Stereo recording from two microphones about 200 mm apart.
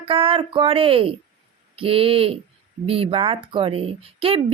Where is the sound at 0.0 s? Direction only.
25° right (ahead or behind).